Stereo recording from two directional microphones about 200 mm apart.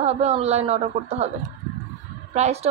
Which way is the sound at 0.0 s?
30° right (ahead or behind).